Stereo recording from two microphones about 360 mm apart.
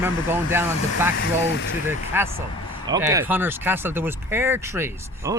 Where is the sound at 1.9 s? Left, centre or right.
Centre.